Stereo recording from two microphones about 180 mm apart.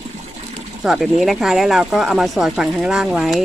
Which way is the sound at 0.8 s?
Centre (ahead or behind).